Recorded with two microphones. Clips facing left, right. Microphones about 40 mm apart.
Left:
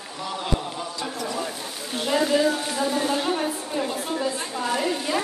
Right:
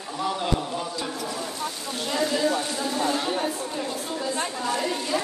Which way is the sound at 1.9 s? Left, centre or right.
Centre.